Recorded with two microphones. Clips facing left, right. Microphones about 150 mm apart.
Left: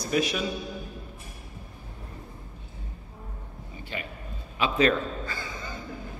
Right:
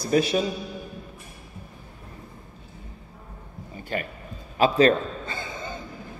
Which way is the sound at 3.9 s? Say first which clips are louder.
Right 7 dB; 50° right (ahead or behind).